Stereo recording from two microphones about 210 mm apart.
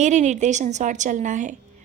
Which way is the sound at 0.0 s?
35° right (ahead or behind).